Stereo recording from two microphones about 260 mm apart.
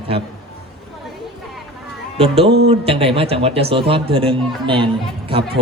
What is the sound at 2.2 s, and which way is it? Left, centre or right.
Speech, right.